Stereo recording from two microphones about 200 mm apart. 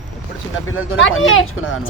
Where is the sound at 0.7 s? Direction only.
75° left (ahead or behind).